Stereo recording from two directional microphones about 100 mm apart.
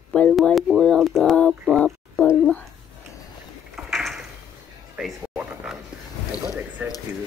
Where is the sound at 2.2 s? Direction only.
10° right (ahead or behind).